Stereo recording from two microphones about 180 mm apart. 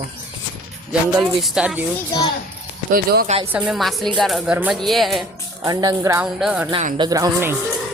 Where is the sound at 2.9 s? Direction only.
55° right (ahead or behind).